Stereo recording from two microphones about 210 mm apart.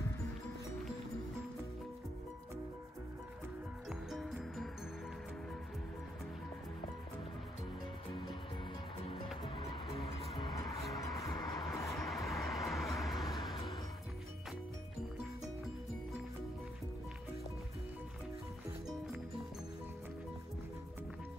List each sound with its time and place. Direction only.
4.1 s music: centre (ahead or behind)
9.4 s music: 25° left (ahead or behind)
11.9 s vehicle: centre (ahead or behind)